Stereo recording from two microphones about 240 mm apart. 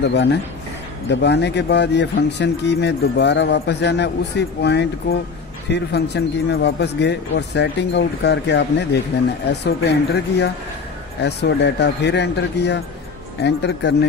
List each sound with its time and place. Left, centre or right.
0.0 s speech: left